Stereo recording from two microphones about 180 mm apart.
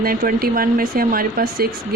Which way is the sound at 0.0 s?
55° right (ahead or behind).